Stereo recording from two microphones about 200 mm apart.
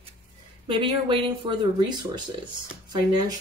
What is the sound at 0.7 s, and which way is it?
Speech, 25° right (ahead or behind).